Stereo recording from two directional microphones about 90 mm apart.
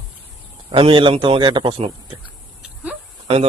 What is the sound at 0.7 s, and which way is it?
A man's voice, 75° right (ahead or behind).